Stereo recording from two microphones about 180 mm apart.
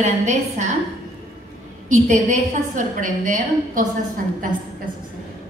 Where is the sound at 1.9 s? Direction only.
45° right (ahead or behind).